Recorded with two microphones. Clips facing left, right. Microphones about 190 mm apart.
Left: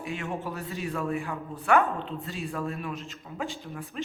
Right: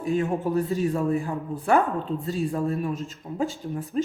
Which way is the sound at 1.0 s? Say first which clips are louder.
Right 6 dB; 35° right (ahead or behind).